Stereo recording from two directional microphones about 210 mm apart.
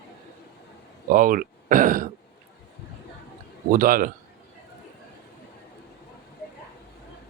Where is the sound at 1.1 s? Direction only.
40° right (ahead or behind).